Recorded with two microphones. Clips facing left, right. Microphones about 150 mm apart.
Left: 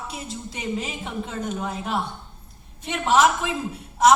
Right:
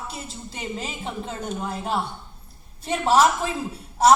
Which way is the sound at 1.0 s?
30° right (ahead or behind).